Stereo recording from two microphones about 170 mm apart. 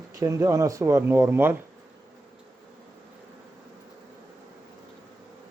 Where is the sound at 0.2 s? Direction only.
20° right (ahead or behind).